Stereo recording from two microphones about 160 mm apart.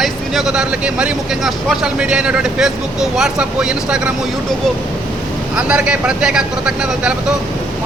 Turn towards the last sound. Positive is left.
turn(degrees=-5)  # may be behind; listen again after turning